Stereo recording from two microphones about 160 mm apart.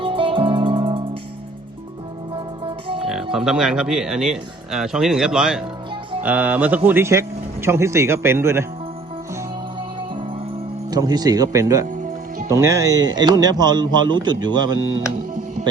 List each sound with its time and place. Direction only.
0.0 s music: 35° right (ahead or behind)
2.6 s music: 35° right (ahead or behind)
3.3 s speech: 5° right (ahead or behind)
10.9 s speech: 25° right (ahead or behind)